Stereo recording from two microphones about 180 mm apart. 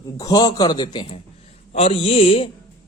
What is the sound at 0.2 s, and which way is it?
Speech, 20° left (ahead or behind).